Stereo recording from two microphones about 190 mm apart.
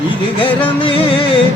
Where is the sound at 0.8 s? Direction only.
25° left (ahead or behind).